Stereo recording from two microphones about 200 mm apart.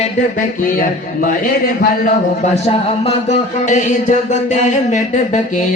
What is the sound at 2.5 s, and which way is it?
Speech, 30° left (ahead or behind).